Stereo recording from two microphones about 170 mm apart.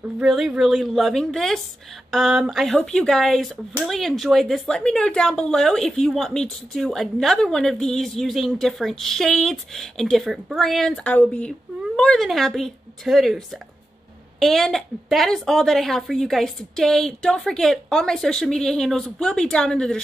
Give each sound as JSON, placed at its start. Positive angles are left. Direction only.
{"t": 0.2, "sound": "a woman's voice", "side_deg": -5}
{"t": 14.4, "sound": "a woman's voice", "side_deg": 0}